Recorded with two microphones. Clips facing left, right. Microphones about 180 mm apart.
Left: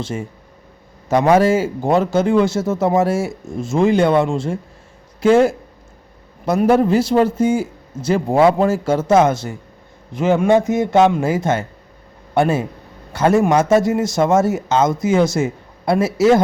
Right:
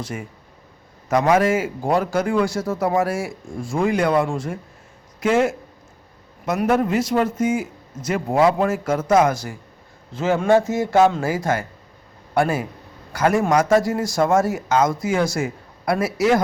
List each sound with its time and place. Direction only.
0.0 s a man's voice: 25° left (ahead or behind)